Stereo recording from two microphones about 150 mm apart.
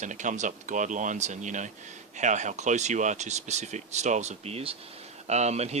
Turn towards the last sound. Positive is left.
turn(degrees=-45)  # may be behind; listen again after turning